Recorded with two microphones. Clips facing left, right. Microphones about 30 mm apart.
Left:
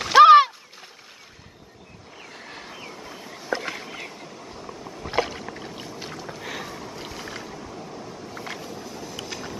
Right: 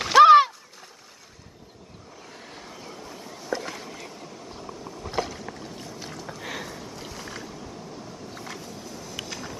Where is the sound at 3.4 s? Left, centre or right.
Left.